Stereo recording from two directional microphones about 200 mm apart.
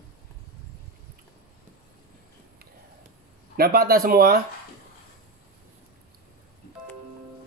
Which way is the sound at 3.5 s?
50° right (ahead or behind).